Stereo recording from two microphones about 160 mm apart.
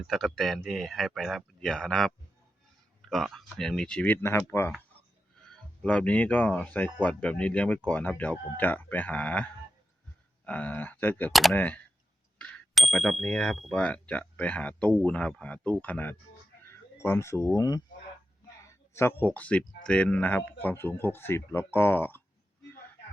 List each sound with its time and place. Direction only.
0.0 s speech: centre (ahead or behind)
11.3 s speech: centre (ahead or behind); by 17.8 s 20° left (ahead or behind)
18.9 s speech: 10° left (ahead or behind)